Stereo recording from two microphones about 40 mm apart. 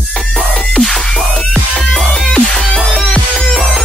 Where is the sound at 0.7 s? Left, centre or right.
Left.